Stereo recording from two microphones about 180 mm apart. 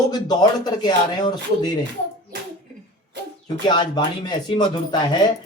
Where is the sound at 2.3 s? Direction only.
70° right (ahead or behind).